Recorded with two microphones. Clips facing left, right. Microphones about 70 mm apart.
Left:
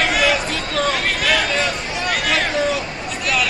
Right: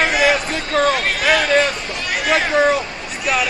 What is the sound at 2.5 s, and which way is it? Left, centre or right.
Hubbub, right.